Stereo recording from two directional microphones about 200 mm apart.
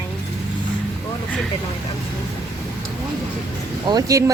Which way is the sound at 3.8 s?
20° right (ahead or behind).